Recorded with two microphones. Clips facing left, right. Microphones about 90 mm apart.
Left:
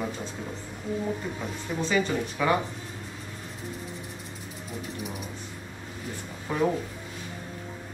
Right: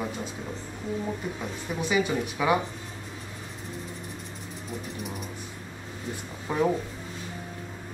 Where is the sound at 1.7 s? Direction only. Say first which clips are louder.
Even; 15° right (ahead or behind).